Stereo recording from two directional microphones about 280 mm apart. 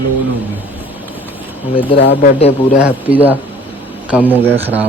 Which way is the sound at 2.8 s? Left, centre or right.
Centre.